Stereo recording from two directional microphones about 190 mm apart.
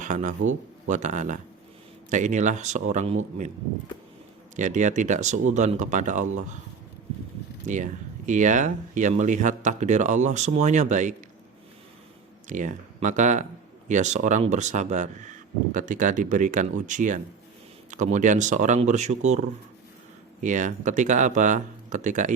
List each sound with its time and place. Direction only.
0.0 s a man's voice: 40° right (ahead or behind)
4.5 s speech: 40° right (ahead or behind)
7.7 s speech: 40° right (ahead or behind)
12.5 s speech: 40° right (ahead or behind)